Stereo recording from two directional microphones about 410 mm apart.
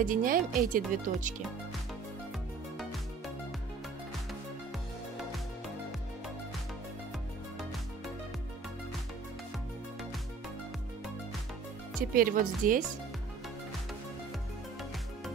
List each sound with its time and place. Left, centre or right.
0.0 s speech: centre
12.1 s speech: right